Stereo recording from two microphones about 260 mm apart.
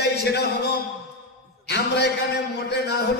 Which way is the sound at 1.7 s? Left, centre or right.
Left.